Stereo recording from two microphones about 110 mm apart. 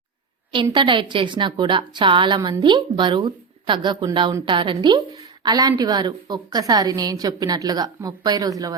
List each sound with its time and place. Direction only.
0.5 s a woman's voice: 45° right (ahead or behind)